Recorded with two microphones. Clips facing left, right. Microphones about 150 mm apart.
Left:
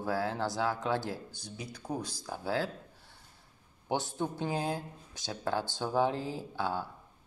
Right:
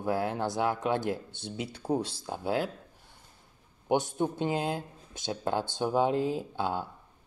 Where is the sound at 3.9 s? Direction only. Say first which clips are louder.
Right 5 dB; 20° right (ahead or behind).